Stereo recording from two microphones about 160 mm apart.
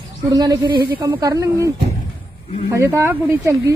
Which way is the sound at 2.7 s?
15° right (ahead or behind).